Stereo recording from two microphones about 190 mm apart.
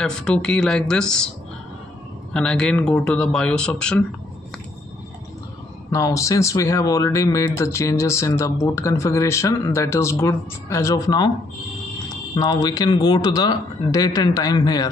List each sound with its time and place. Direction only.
0.0 s speech: 5° left (ahead or behind)
2.3 s speech: 5° left (ahead or behind)
5.9 s speech: 15° left (ahead or behind)
12.4 s speech: 20° left (ahead or behind)